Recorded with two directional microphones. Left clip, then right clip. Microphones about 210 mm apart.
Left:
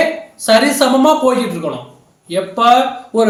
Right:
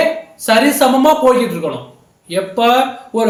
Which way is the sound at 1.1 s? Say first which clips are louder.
Right 2 dB; 10° right (ahead or behind).